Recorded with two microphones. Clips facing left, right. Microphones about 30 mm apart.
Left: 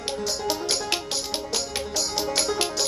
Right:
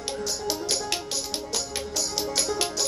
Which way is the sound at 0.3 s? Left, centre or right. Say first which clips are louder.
Left 2 dB; left.